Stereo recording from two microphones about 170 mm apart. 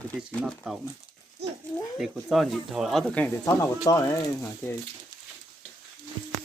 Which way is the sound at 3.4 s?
20° left (ahead or behind).